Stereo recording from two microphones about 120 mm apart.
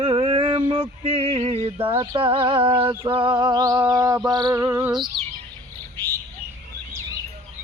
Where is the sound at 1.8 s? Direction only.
20° right (ahead or behind).